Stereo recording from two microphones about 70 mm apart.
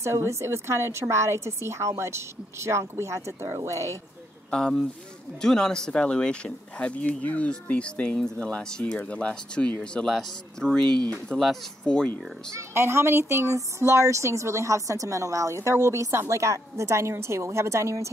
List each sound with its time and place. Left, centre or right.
0.0 s a woman's voice: right
4.5 s speech: centre
10.0 s speech: centre
12.5 s speech: right